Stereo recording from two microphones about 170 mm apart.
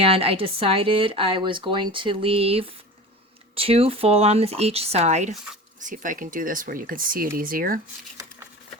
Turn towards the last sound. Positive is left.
turn(degrees=-55)  # may be behind; listen again after turning